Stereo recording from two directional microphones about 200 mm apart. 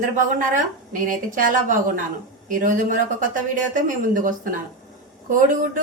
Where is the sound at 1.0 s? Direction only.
40° right (ahead or behind).